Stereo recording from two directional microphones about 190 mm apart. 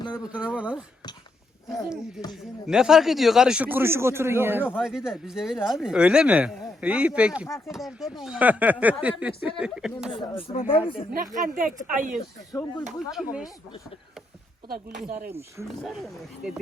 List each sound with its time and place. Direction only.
0.2 s speech: 5° right (ahead or behind)
10.1 s speech: 30° left (ahead or behind)
11.3 s a woman's voice: 45° right (ahead or behind)
12.9 s speech: centre (ahead or behind)
14.7 s a woman's voice: 50° right (ahead or behind)
15.3 s speech: 15° right (ahead or behind)